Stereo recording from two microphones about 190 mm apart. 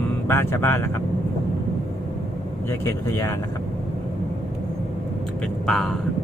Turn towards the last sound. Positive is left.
turn(degrees=0)  # may be behind; listen again after turning